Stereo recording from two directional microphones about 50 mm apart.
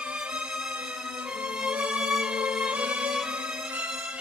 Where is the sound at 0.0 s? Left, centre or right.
Right.